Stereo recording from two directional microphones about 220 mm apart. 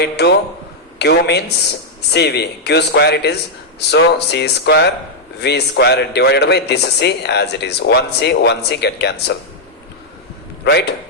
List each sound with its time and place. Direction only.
0.9 s a man's voice: 50° left (ahead or behind)
10.6 s a man's voice: 50° left (ahead or behind)